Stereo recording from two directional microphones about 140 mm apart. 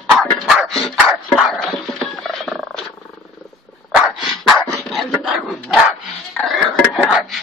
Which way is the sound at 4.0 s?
Centre (ahead or behind).